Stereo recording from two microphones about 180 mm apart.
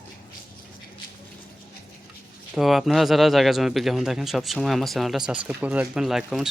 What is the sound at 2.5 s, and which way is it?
Speech, centre (ahead or behind).